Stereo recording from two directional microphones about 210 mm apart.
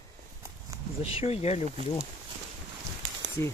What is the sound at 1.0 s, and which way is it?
Speech, 30° left (ahead or behind).